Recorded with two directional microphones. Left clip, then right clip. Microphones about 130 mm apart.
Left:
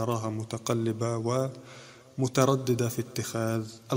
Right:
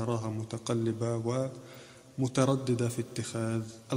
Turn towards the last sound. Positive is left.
turn(degrees=40)  # may be behind; listen again after turning